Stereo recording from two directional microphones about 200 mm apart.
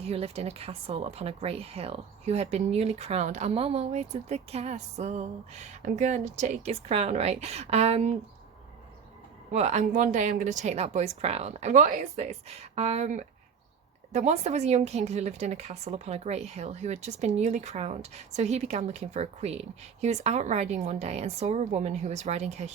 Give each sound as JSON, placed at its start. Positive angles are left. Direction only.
{"t": 0.0, "sound": "speech", "side_deg": -30}
{"t": 9.5, "sound": "speech", "side_deg": -35}